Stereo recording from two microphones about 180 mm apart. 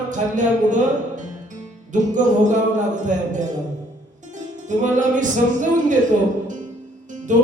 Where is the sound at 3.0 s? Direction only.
45° right (ahead or behind).